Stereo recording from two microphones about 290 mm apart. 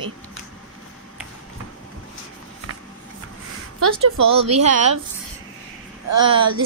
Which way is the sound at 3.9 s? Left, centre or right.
Right.